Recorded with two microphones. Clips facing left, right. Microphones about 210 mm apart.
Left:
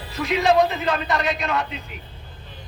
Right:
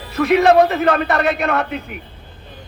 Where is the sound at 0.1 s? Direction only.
60° right (ahead or behind).